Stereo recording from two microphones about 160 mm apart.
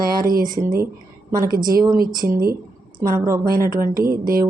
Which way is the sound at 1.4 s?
65° right (ahead or behind).